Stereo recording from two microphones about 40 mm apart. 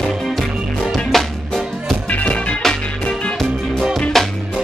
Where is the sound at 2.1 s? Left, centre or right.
Left.